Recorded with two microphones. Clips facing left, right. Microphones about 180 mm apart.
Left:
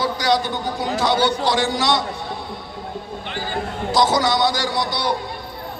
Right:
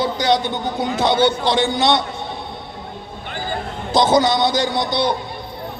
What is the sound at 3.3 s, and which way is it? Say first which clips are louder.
Basketball bounce: right 3 dB; 50° right (ahead or behind).